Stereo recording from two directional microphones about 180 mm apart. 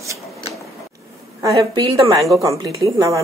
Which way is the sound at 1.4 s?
20° right (ahead or behind).